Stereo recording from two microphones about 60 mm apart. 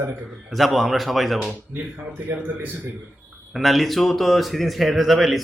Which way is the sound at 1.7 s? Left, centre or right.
Right.